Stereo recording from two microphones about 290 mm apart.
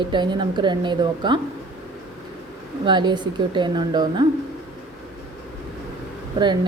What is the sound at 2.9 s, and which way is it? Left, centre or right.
Speech, centre.